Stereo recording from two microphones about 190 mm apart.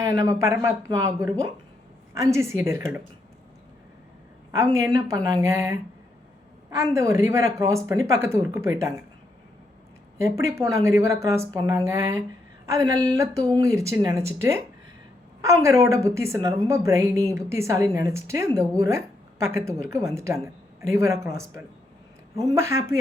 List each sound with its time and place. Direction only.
0.0 s a woman's voice: 15° right (ahead or behind)
4.5 s a woman's voice: 15° right (ahead or behind)
10.2 s a woman's voice: 15° right (ahead or behind)
15.4 s a woman's voice: 15° right (ahead or behind)